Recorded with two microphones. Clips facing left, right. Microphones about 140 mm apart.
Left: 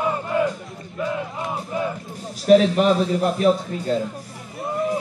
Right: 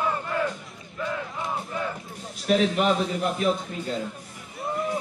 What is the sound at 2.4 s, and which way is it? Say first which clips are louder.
A man's voice: left 7 dB; 40° left (ahead or behind).